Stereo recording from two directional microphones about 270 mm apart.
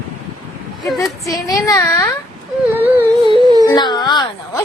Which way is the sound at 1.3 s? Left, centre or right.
Centre.